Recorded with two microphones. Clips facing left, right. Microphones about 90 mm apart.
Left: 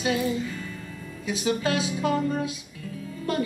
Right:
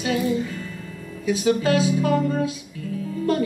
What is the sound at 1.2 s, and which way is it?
Speech, 20° left (ahead or behind).